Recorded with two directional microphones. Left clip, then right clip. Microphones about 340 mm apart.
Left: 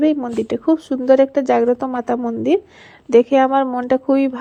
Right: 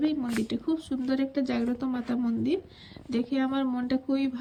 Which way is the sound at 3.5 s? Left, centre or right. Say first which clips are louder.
Left 13 dB; centre.